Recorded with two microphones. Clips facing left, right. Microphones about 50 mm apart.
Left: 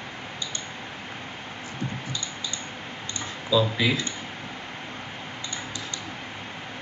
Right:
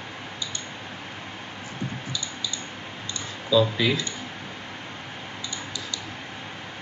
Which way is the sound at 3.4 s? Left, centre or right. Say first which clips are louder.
Right 2 dB; centre.